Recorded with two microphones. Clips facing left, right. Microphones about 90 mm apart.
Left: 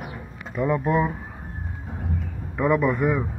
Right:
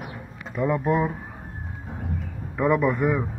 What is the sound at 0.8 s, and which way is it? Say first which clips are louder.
Speech: even; centre (ahead or behind).